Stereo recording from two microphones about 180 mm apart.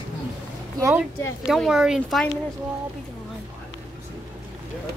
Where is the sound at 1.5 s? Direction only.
5° right (ahead or behind).